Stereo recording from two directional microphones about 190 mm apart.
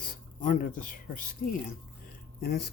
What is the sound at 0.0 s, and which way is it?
Speech, 45° left (ahead or behind).